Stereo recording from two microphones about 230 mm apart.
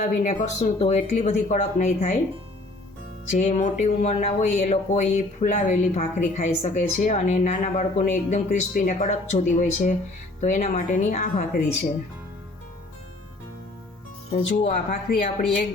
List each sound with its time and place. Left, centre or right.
0.0 s speech: left
3.2 s speech: left
14.6 s speech: left